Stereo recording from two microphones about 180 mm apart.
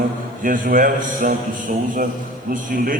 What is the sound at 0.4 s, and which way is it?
A man's voice, 50° right (ahead or behind).